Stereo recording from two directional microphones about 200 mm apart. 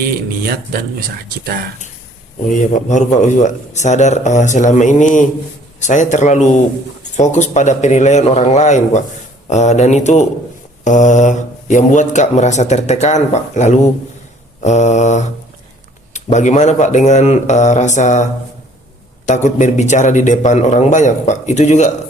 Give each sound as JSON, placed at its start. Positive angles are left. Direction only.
{"t": 0.4, "sound": "speech", "side_deg": -50}
{"t": 2.7, "sound": "speech", "side_deg": 35}